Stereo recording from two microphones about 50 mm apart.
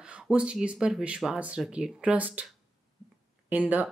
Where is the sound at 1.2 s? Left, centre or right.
Centre.